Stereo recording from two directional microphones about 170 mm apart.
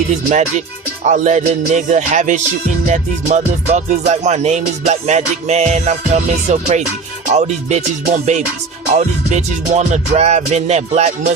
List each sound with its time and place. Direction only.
0.3 s music: 45° right (ahead or behind)